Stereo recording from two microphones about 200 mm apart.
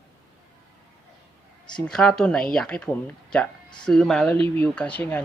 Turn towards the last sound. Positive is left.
turn(degrees=5)  # may be behind; listen again after turning